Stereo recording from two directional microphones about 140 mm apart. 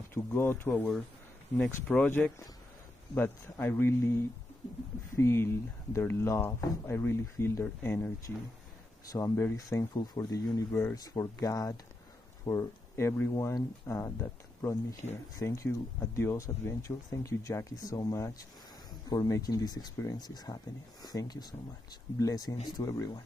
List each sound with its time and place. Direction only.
0.1 s speech: 15° left (ahead or behind)
9.1 s speech: 20° left (ahead or behind)